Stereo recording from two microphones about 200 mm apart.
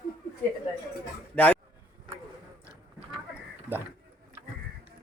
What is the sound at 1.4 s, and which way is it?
Speech, 5° left (ahead or behind).